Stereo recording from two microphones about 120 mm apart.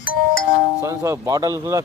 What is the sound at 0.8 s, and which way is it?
Speech, 25° right (ahead or behind).